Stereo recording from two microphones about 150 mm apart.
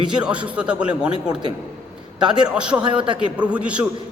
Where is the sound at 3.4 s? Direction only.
10° right (ahead or behind).